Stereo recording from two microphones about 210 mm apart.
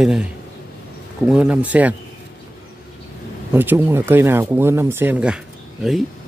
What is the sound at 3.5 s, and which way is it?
Speech, 10° right (ahead or behind).